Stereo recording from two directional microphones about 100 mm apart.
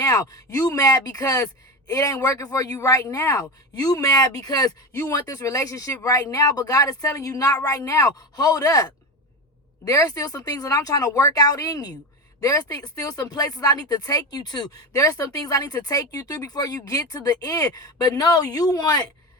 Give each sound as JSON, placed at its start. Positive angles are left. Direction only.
{"t": 0.0, "sound": "speech", "side_deg": 35}